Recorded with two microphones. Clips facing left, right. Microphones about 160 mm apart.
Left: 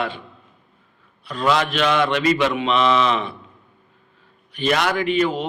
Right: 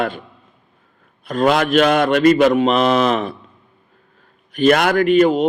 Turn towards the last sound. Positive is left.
turn(degrees=-50)  # may be behind; listen again after turning